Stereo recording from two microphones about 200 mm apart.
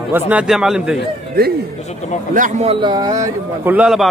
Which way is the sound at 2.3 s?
40° right (ahead or behind).